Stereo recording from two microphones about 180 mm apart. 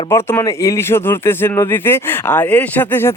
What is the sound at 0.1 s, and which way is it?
Speech, 15° left (ahead or behind).